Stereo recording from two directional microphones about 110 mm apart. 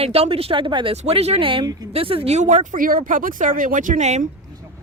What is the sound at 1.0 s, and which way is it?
Speech, 65° right (ahead or behind).